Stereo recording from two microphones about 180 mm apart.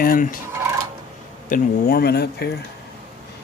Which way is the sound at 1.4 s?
55° left (ahead or behind).